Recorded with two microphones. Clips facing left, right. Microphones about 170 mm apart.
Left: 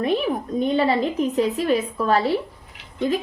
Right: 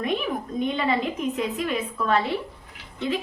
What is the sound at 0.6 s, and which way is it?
A woman's voice, 35° left (ahead or behind).